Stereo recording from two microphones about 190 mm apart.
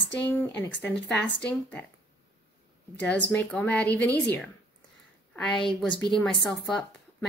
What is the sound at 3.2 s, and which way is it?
Speech, 5° left (ahead or behind).